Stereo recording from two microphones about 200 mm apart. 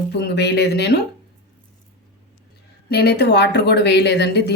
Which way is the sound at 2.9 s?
55° left (ahead or behind).